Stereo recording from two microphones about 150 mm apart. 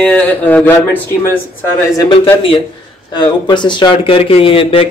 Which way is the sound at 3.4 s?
30° left (ahead or behind).